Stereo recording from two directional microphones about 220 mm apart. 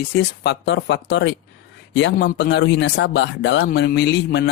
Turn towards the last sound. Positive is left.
turn(degrees=50)  # may be behind; listen again after turning